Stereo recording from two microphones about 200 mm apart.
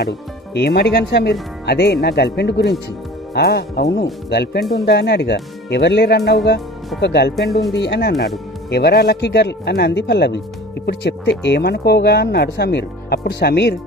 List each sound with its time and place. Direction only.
0.5 s speech: 55° left (ahead or behind)